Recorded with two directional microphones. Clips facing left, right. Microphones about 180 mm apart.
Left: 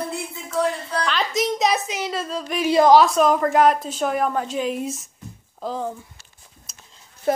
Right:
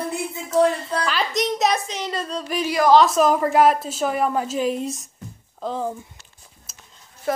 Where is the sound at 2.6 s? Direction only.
25° left (ahead or behind).